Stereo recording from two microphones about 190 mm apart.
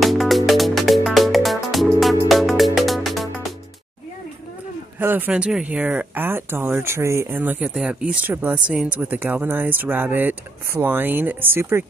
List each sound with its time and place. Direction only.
0.0 s music: centre (ahead or behind)
4.9 s speech: 10° right (ahead or behind)